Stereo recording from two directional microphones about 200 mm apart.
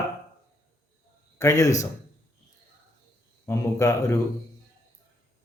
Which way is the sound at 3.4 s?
15° left (ahead or behind).